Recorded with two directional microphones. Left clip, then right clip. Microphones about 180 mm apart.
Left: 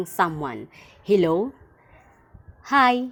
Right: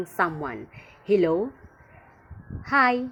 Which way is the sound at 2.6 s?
40° left (ahead or behind).